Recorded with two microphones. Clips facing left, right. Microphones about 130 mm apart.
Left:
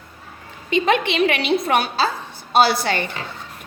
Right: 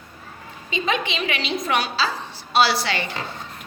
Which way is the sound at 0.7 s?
60° left (ahead or behind).